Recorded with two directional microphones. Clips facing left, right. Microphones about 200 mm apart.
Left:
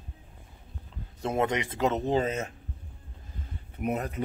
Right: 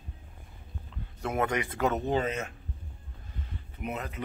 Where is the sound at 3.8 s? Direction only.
40° left (ahead or behind).